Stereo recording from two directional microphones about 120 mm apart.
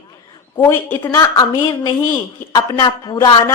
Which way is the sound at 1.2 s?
30° left (ahead or behind).